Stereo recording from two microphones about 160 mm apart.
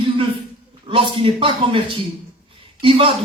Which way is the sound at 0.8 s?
30° right (ahead or behind).